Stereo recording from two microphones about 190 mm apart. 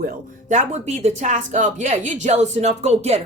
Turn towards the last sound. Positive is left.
turn(degrees=-35)  # may be behind; listen again after turning